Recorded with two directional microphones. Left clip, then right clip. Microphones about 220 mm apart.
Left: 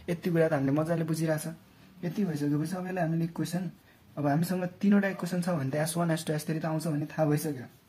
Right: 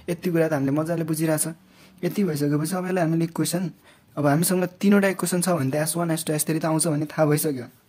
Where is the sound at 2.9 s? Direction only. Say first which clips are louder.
Right 9 dB; 50° right (ahead or behind); by 6.4 s 25° right (ahead or behind).